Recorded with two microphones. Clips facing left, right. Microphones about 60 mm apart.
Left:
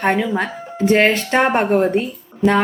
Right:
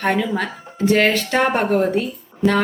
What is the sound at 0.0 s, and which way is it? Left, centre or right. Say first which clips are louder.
Speech: left 2 dB; centre.